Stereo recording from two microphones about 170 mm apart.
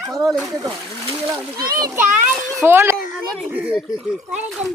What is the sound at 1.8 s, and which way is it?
A child's voice, 15° right (ahead or behind).